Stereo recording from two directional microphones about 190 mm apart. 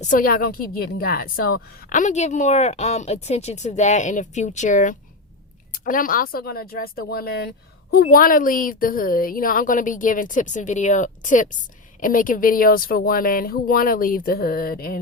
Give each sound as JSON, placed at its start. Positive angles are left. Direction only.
{"t": 0.0, "sound": "a woman's voice", "side_deg": 45}